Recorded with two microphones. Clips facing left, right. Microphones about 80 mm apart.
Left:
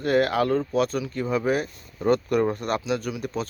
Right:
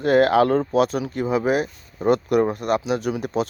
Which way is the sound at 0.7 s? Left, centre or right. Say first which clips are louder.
Right 4 dB; centre.